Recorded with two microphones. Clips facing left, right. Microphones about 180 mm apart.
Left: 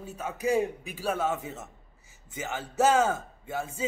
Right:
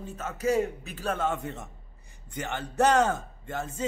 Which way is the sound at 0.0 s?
10° left (ahead or behind).